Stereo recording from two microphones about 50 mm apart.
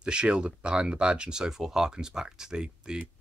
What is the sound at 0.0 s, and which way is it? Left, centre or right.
Speech, centre.